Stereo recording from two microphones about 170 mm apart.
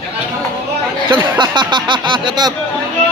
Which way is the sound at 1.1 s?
30° right (ahead or behind).